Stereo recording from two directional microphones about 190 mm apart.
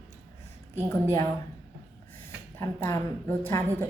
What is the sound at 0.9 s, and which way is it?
Speech, 15° left (ahead or behind).